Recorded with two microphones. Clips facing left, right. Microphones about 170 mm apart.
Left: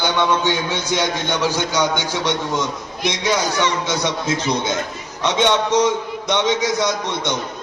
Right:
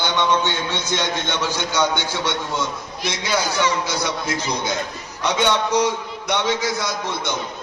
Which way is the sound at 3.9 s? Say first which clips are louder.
Left 3 dB; 20° left (ahead or behind).